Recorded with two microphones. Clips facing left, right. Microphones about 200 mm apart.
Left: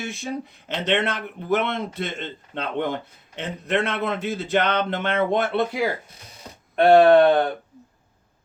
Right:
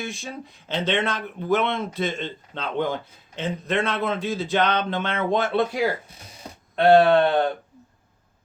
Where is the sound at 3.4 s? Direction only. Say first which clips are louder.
Even; 65° left (ahead or behind).